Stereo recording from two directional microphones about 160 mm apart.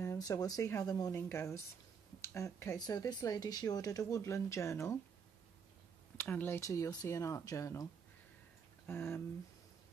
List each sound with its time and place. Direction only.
0.0 s speech: 20° left (ahead or behind)
6.1 s speech: 10° left (ahead or behind)